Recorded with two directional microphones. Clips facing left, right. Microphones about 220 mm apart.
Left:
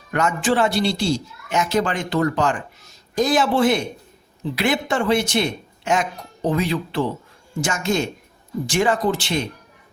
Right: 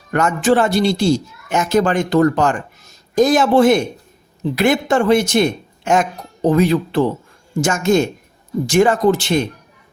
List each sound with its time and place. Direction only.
0.1 s speech: 45° right (ahead or behind)